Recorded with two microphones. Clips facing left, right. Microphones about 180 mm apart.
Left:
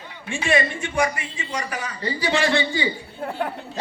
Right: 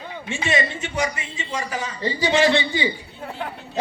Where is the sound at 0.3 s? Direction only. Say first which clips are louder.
Left 2 dB; 20° right (ahead or behind).